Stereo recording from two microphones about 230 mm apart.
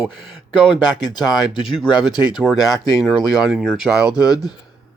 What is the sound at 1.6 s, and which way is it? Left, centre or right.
Speech, centre.